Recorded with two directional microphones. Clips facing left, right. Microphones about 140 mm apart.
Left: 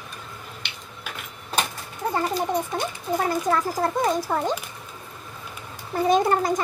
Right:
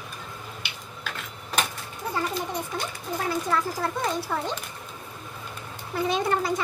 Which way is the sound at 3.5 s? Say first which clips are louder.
Left 4 dB; 45° left (ahead or behind).